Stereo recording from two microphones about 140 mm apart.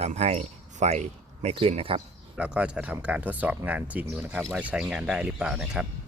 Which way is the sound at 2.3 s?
5° right (ahead or behind).